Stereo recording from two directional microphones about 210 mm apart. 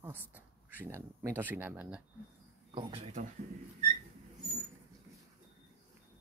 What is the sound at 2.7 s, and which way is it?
Speech, 25° right (ahead or behind).